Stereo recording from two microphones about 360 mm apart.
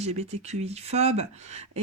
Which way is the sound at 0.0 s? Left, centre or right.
Centre.